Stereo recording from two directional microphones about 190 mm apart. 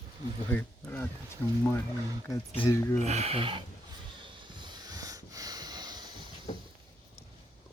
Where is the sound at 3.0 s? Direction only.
35° right (ahead or behind).